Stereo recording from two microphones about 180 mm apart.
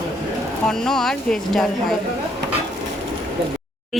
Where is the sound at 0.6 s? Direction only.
5° left (ahead or behind).